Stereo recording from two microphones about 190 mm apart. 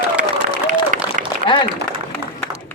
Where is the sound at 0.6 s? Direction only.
45° right (ahead or behind).